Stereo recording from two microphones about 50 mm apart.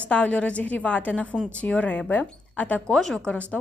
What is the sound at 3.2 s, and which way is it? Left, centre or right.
Speech, left.